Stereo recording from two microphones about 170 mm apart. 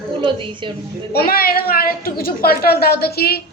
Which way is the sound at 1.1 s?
65° left (ahead or behind).